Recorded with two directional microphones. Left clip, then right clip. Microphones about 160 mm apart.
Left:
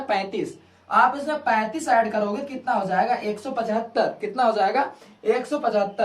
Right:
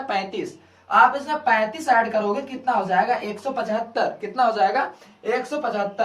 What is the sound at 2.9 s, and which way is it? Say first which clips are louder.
A woman's voice: right 1 dB; 15° left (ahead or behind).